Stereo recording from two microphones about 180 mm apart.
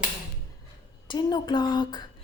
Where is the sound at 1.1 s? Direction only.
25° left (ahead or behind).